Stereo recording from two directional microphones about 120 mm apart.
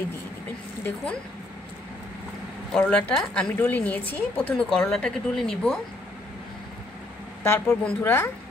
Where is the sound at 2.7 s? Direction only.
5° left (ahead or behind).